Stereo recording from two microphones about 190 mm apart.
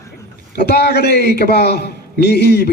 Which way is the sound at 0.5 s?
60° left (ahead or behind).